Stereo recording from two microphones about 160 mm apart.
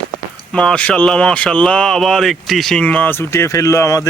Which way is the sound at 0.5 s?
5° left (ahead or behind).